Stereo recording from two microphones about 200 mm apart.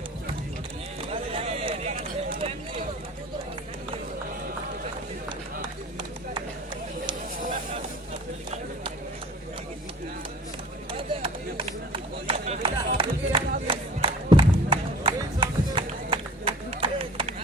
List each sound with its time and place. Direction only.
1.1 s run: 30° right (ahead or behind)
10.9 s chop: 25° right (ahead or behind)